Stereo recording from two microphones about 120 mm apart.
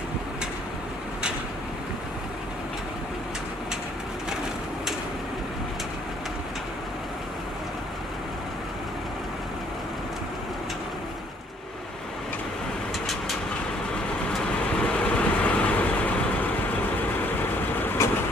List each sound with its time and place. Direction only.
13.0 s vehicle: centre (ahead or behind)
14.8 s vehicle: 10° left (ahead or behind)
17.2 s vehicle: 15° left (ahead or behind)